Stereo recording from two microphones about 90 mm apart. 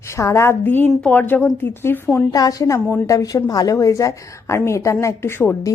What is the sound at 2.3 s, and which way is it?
A woman's voice, 45° left (ahead or behind).